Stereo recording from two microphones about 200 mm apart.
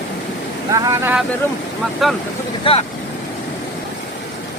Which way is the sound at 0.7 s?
15° right (ahead or behind).